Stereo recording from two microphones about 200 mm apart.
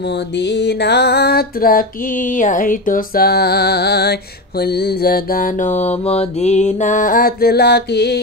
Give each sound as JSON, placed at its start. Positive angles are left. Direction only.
{"t": 0.5, "sound": "music", "side_deg": 60}